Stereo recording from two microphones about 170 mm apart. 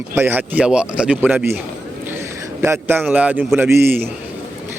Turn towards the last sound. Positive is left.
turn(degrees=-15)  # may be behind; listen again after turning